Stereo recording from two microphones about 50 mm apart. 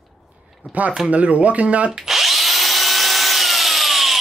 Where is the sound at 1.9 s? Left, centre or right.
Centre.